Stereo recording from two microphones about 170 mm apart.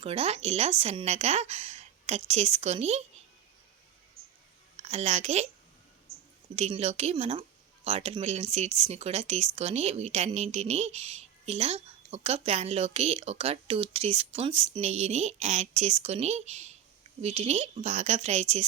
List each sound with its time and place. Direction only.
0.0 s speech: 35° right (ahead or behind)
4.8 s a woman's voice: 40° right (ahead or behind)
6.6 s speech: 40° right (ahead or behind)